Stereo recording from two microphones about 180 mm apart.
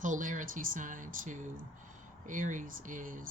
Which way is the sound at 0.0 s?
45° right (ahead or behind).